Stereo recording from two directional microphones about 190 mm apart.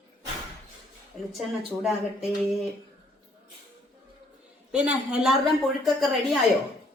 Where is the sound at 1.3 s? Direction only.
Centre (ahead or behind).